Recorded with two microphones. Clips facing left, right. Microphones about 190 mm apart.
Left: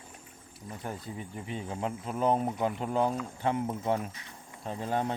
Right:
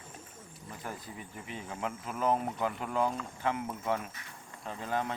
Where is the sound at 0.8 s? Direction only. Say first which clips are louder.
Left 4 dB; 30° left (ahead or behind).